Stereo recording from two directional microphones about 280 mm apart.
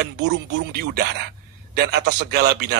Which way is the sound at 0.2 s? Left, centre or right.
Right.